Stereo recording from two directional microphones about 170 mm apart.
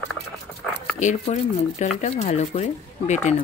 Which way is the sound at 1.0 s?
45° left (ahead or behind).